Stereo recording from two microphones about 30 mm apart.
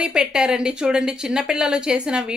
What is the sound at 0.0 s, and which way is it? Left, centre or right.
A woman's voice, right.